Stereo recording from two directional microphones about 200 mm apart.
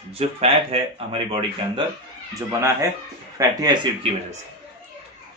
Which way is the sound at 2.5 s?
15° right (ahead or behind).